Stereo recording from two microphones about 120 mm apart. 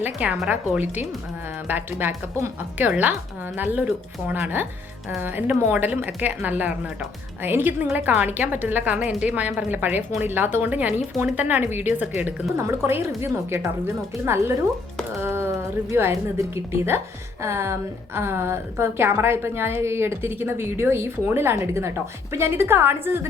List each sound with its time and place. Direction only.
0.0 s a woman's voice: 10° right (ahead or behind)
1.6 s a woman's voice: 15° right (ahead or behind)
15.1 s a sound: 20° right (ahead or behind)
16.6 s a woman's voice: 20° right (ahead or behind)